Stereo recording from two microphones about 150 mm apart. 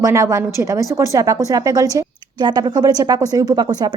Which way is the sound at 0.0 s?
20° right (ahead or behind).